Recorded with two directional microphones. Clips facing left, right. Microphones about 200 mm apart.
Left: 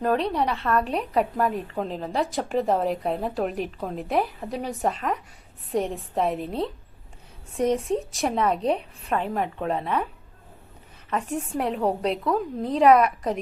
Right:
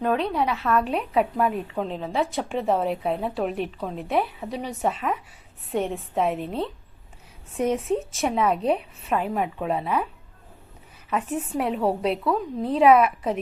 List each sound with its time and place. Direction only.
0.0 s speech: centre (ahead or behind)
11.3 s speech: centre (ahead or behind)